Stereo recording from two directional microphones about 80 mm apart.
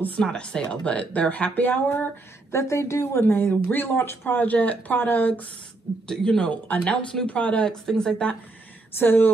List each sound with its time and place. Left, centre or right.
0.2 s speech: centre
2.5 s speech: left
6.0 s speech: centre
8.9 s speech: left